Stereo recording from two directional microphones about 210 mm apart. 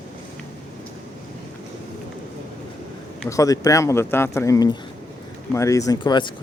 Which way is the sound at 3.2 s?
15° left (ahead or behind).